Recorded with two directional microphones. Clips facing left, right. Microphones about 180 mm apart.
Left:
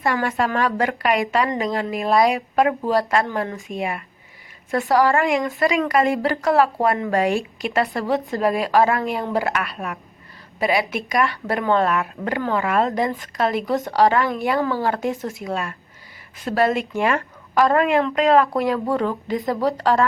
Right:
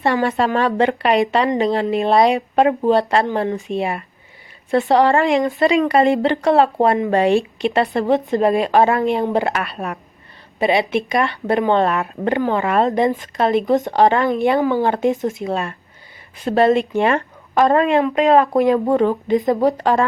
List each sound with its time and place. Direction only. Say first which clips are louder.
0.0 s speech: right 4 dB; 30° right (ahead or behind)
3.7 s speech: right 5 dB; 30° right (ahead or behind)
10.6 s speech: right 4 dB; 25° right (ahead or behind)